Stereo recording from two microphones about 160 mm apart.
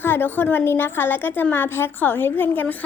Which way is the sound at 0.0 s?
10° left (ahead or behind).